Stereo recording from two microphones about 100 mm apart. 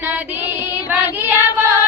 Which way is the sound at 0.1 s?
20° right (ahead or behind).